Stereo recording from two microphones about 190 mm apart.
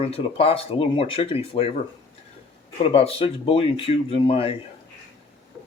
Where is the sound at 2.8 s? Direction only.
30° left (ahead or behind).